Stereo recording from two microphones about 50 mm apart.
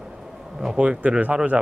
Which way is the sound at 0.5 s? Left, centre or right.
Centre.